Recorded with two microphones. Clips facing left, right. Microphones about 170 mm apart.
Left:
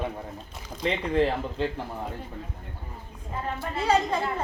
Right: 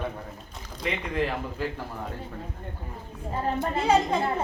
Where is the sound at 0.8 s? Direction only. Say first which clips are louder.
Left 4 dB; 30° left (ahead or behind).